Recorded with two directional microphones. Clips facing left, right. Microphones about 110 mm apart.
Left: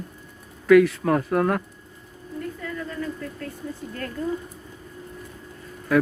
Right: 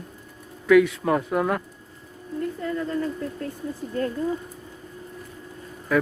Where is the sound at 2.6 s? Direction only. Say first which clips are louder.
Right 7 dB; 25° right (ahead or behind).